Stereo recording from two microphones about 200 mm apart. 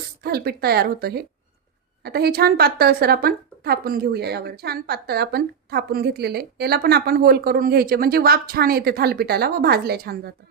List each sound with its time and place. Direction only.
0.2 s a woman's voice: 50° right (ahead or behind)